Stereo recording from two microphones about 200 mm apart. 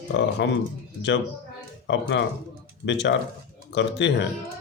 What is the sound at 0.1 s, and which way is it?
Speech, 60° left (ahead or behind).